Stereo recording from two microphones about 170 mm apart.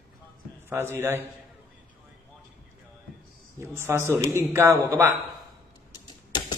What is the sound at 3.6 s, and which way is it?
Speech, 15° right (ahead or behind).